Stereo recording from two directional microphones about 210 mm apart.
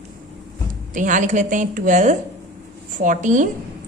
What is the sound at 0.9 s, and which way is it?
A woman's voice, 35° right (ahead or behind).